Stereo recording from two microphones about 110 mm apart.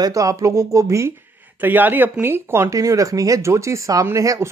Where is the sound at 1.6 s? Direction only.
15° right (ahead or behind).